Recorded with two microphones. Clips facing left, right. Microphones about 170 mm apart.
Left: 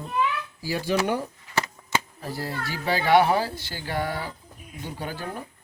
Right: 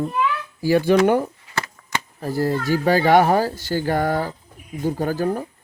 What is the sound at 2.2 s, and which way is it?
Speech, 45° right (ahead or behind).